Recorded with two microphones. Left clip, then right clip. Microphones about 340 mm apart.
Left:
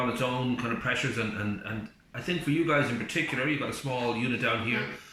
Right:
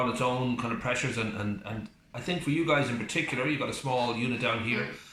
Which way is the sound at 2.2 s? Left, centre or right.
Centre.